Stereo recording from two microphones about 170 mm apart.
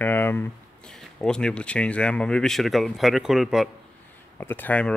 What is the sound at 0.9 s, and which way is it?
Speech, 5° left (ahead or behind).